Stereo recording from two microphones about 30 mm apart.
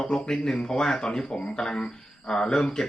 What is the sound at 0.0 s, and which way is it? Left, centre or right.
Speech, left.